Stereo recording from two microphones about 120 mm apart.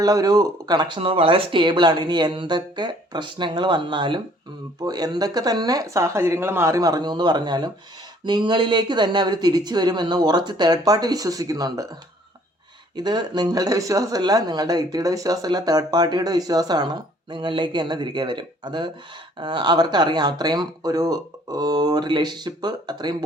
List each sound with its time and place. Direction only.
0.0 s speech: 30° right (ahead or behind)
13.0 s speech: 35° right (ahead or behind)